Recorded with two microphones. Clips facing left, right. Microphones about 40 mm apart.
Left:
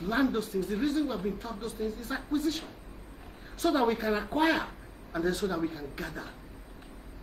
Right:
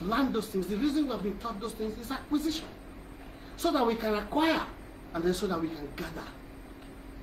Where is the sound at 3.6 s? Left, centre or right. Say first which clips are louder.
Left 1 dB; centre.